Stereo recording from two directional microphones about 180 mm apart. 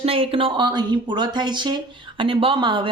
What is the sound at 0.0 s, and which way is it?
Speech, 30° right (ahead or behind).